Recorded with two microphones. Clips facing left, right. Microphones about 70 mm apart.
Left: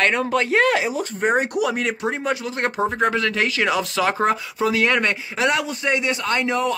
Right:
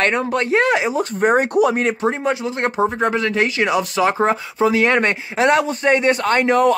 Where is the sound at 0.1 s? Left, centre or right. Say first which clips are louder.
Right 2 dB; centre.